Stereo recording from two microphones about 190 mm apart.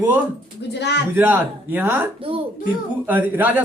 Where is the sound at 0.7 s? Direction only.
65° left (ahead or behind).